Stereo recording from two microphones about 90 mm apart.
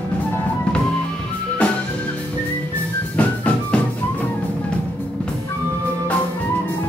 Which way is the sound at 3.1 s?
15° left (ahead or behind).